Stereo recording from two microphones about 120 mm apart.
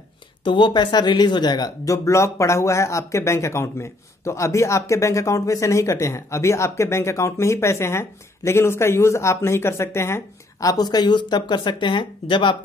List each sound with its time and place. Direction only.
0.4 s speech: 40° left (ahead or behind)